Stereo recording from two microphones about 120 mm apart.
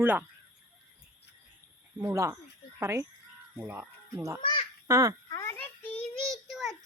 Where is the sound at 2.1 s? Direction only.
20° right (ahead or behind).